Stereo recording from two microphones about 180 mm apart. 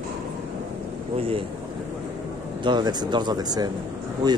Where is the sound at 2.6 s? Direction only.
25° right (ahead or behind).